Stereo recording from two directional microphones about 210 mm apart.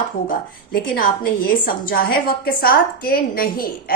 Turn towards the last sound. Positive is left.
turn(degrees=45)  # may be behind; listen again after turning